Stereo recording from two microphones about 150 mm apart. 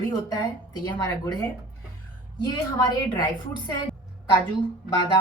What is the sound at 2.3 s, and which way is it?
Speech, 25° left (ahead or behind).